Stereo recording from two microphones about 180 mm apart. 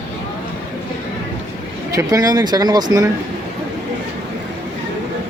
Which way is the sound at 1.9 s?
20° right (ahead or behind).